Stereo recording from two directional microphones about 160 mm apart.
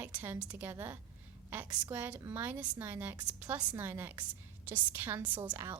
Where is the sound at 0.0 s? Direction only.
10° right (ahead or behind).